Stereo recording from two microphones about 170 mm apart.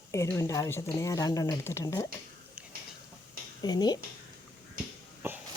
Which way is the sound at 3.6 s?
25° left (ahead or behind).